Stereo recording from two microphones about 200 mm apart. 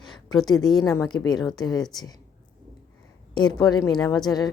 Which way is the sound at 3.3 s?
20° left (ahead or behind).